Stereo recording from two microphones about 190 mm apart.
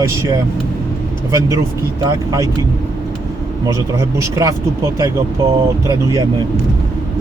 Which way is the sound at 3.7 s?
15° right (ahead or behind).